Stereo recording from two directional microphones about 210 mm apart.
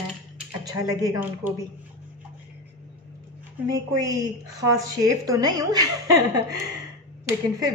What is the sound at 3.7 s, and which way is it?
A woman's voice, 15° right (ahead or behind).